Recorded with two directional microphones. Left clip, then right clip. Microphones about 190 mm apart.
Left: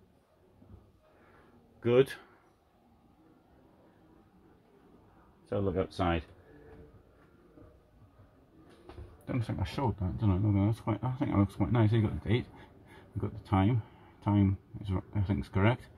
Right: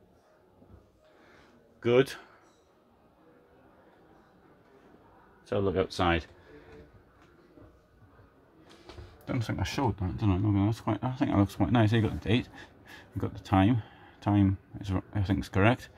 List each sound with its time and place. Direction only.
1.8 s speech: 10° right (ahead or behind)
5.5 s speech: 20° right (ahead or behind)
9.2 s speech: 10° right (ahead or behind); by 15.9 s 30° right (ahead or behind)